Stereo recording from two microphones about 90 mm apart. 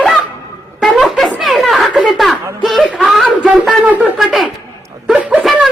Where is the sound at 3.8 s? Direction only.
20° right (ahead or behind).